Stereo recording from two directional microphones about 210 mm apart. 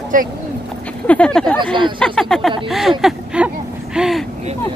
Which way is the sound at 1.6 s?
25° right (ahead or behind).